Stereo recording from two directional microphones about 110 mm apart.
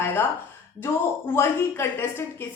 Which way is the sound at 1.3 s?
20° left (ahead or behind).